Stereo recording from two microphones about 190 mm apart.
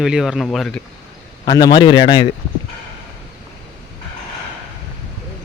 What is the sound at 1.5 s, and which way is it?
Speech, 20° left (ahead or behind).